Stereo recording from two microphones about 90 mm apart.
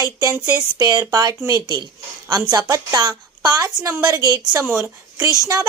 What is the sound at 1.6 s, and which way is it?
A woman's voice, 55° right (ahead or behind).